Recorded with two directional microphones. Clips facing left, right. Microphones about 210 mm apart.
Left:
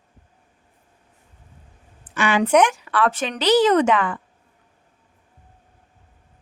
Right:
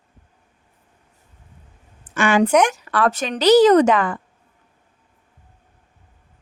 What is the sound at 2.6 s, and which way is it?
A woman's voice, 40° right (ahead or behind).